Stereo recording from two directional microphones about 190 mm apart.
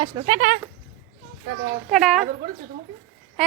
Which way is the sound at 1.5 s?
70° right (ahead or behind).